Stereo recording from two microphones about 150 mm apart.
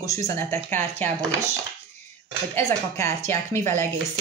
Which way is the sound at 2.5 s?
20° left (ahead or behind).